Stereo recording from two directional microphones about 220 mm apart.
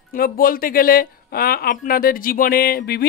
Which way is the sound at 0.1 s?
40° left (ahead or behind).